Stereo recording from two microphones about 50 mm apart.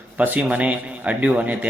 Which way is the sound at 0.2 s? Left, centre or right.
Right.